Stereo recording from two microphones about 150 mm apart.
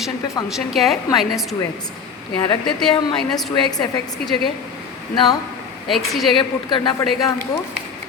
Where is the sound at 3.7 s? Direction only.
25° left (ahead or behind).